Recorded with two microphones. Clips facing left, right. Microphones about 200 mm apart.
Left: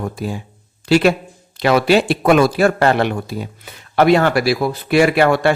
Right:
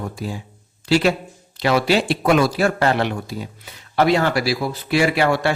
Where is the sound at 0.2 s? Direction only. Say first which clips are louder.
Left 4 dB; 55° left (ahead or behind).